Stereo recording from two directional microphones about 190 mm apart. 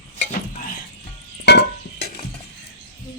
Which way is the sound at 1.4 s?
60° left (ahead or behind).